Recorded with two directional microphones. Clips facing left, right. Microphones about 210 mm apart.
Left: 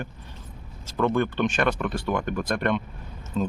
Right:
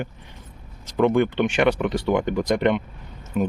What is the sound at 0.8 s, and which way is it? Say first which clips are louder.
Speech: right 5 dB; 15° right (ahead or behind).